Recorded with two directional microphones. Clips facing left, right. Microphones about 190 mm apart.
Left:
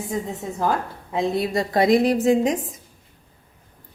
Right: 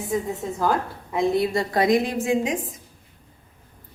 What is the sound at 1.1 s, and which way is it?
A woman's voice, 20° left (ahead or behind).